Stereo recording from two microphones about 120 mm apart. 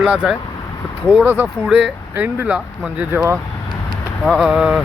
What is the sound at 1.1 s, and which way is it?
Speech, 15° right (ahead or behind).